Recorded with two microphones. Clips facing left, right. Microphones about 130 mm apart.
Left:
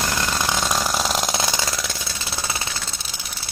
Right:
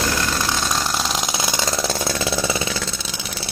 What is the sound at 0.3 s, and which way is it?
Chainsaw, 10° left (ahead or behind).